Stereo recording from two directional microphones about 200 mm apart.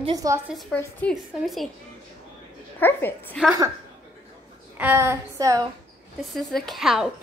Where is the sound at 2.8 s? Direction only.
10° left (ahead or behind).